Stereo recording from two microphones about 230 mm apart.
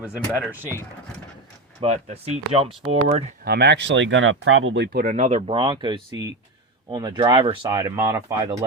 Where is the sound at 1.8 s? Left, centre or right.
Right.